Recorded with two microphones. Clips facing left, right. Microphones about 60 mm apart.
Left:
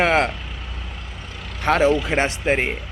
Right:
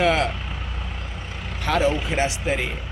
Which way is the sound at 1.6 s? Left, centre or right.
Left.